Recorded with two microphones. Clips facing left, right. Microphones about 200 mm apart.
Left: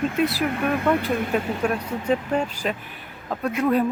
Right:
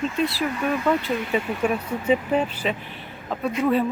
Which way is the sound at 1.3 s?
5° right (ahead or behind).